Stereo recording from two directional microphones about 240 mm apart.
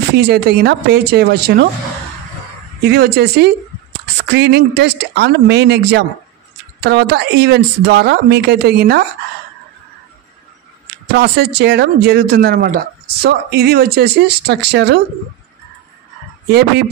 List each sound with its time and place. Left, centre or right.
0.1 s speech: right
2.8 s speech: right
11.1 s speech: right